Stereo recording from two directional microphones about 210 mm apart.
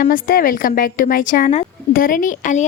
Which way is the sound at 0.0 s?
45° left (ahead or behind).